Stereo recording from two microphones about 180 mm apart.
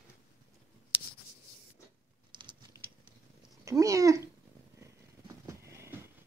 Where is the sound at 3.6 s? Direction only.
20° right (ahead or behind).